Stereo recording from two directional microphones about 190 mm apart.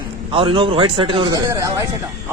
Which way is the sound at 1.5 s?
15° right (ahead or behind).